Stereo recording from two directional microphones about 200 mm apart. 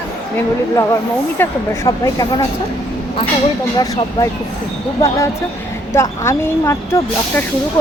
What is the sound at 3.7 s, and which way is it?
Speech, 20° left (ahead or behind).